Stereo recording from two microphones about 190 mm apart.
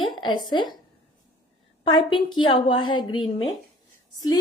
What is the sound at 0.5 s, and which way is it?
Speech, 25° left (ahead or behind).